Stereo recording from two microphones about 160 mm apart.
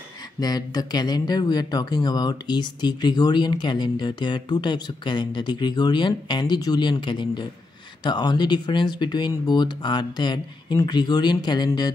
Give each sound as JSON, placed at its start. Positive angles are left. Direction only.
{"t": 0.4, "sound": "speech", "side_deg": 25}